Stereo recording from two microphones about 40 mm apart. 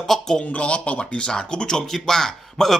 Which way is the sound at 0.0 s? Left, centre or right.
Centre.